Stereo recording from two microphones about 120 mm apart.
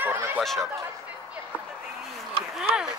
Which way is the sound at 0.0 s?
20° right (ahead or behind).